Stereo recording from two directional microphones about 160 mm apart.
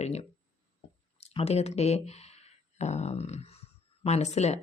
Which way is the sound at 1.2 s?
40° left (ahead or behind).